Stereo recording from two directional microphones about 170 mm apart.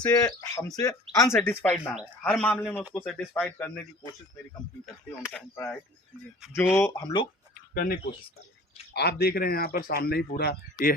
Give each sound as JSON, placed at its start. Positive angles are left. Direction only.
{"t": 0.1, "sound": "speech", "side_deg": 20}
{"t": 5.5, "sound": "speech", "side_deg": 5}
{"t": 6.7, "sound": "speech", "side_deg": 15}
{"t": 7.7, "sound": "speech", "side_deg": 60}
{"t": 8.9, "sound": "speech", "side_deg": 75}